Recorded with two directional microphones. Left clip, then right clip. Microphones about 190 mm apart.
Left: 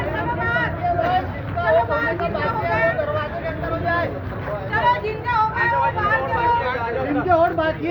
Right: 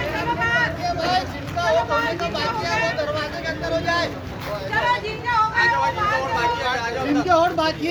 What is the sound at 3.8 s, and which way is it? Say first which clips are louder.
Vehicle: left 2 dB; 60° right (ahead or behind).